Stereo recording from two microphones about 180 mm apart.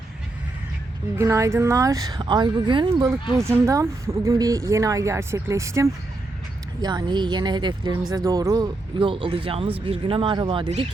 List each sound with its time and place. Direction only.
1.1 s a woman's voice: 15° right (ahead or behind); by 10.8 s 30° right (ahead or behind)